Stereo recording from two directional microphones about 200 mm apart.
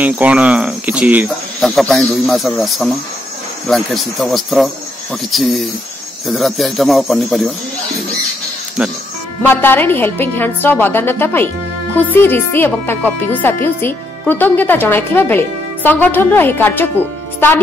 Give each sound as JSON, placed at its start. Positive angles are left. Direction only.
{"t": 0.0, "sound": "speech", "side_deg": -5}
{"t": 9.4, "sound": "a woman's voice", "side_deg": 10}